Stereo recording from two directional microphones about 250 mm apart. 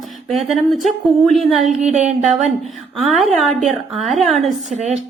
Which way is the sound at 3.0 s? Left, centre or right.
Centre.